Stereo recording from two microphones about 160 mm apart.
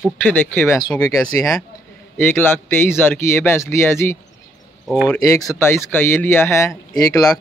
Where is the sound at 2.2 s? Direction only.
15° left (ahead or behind).